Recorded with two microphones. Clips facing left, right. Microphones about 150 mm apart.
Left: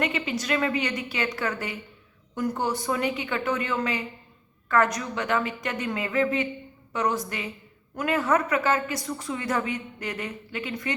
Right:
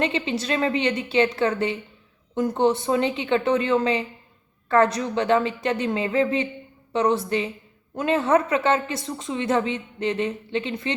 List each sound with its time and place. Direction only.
0.0 s a woman's voice: 30° right (ahead or behind)